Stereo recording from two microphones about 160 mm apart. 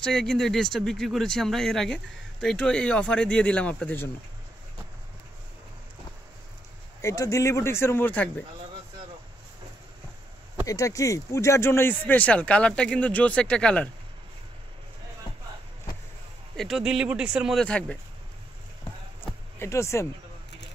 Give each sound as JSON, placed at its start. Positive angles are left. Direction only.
{"t": 0.0, "sound": "speech", "side_deg": 5}
{"t": 7.0, "sound": "speech", "side_deg": 20}
{"t": 10.7, "sound": "speech", "side_deg": 20}
{"t": 16.5, "sound": "speech", "side_deg": 0}
{"t": 19.6, "sound": "speech", "side_deg": 15}